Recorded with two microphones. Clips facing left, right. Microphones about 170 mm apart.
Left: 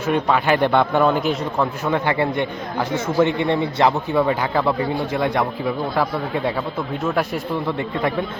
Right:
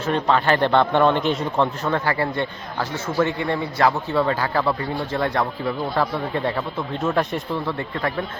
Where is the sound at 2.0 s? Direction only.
20° left (ahead or behind).